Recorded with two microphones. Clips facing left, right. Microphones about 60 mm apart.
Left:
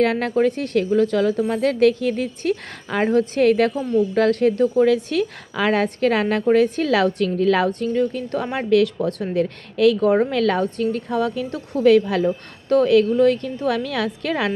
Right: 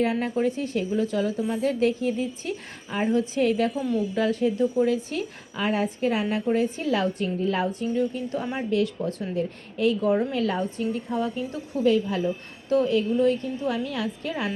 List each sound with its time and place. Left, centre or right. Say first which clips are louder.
0.0 s a woman's voice: left 6 dB; left
8.5 s a woman's voice: left 9 dB; left
9.3 s a woman's voice: left 6 dB; left
10.3 s a woman's voice: left 6 dB; left
12.2 s a woman's voice: left 6 dB; left